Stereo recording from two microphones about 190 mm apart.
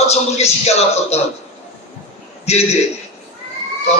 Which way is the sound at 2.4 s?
35° left (ahead or behind).